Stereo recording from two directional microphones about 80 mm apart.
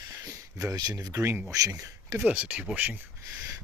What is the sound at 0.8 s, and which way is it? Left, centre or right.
Speech, right.